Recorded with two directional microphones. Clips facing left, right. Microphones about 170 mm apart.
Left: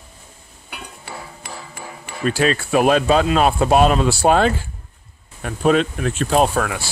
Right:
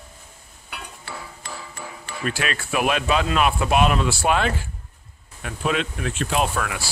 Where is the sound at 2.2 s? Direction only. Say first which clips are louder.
Left 8 dB; 30° left (ahead or behind).